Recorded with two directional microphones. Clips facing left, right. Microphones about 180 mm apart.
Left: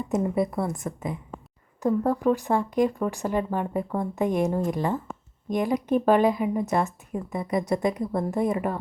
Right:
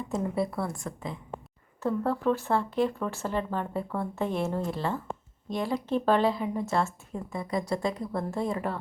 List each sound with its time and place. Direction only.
0.1 s a woman's voice: 20° left (ahead or behind)